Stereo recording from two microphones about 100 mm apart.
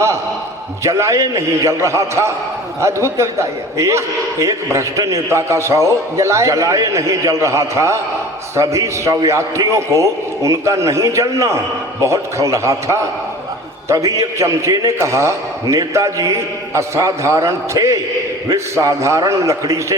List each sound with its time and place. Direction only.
0.9 s a man's voice: 30° right (ahead or behind)